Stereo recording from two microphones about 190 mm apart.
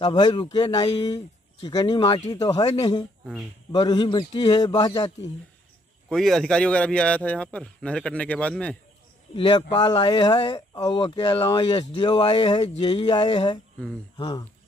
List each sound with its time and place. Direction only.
0.0 s speech: 20° left (ahead or behind)
6.0 s a man's voice: centre (ahead or behind)
9.3 s speech: 25° left (ahead or behind)